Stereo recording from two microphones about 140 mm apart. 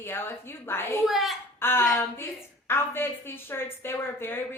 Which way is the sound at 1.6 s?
15° left (ahead or behind).